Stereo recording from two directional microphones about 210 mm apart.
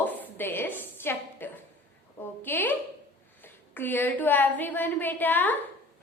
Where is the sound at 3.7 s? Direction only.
10° left (ahead or behind).